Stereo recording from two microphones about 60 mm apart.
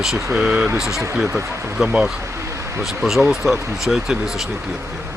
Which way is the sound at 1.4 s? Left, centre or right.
Right.